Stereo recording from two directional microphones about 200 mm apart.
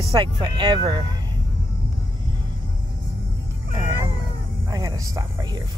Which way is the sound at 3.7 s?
10° right (ahead or behind).